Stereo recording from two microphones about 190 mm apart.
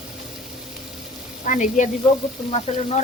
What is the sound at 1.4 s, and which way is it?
Speech, 40° left (ahead or behind).